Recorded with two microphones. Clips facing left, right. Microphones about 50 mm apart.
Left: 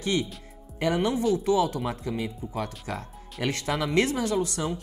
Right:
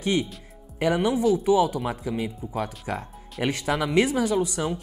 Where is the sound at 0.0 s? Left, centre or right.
Centre.